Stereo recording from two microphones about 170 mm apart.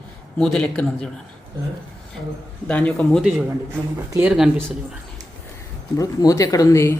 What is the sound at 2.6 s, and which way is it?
Speech, 5° left (ahead or behind).